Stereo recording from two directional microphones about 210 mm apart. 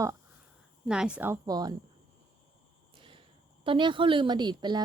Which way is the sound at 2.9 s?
25° right (ahead or behind).